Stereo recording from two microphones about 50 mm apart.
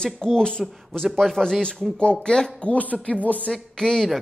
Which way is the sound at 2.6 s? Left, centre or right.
Left.